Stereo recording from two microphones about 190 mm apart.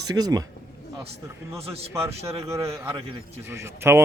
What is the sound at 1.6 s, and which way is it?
Speech, 30° right (ahead or behind).